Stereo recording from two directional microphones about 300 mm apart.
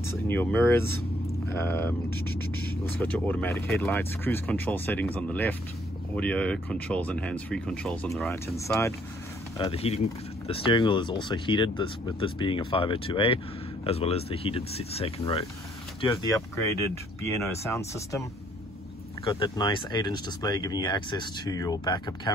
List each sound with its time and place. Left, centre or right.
0.0 s speech: centre
17.5 s speech: centre
19.2 s speech: centre